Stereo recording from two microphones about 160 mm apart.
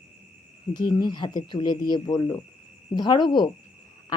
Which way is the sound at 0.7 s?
25° left (ahead or behind).